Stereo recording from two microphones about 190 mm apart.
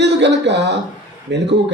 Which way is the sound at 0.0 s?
65° right (ahead or behind).